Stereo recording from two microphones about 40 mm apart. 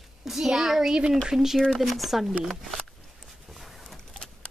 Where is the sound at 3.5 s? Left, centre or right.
Centre.